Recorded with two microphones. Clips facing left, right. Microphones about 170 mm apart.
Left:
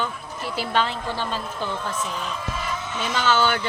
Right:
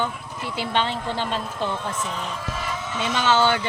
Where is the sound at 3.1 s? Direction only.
20° right (ahead or behind).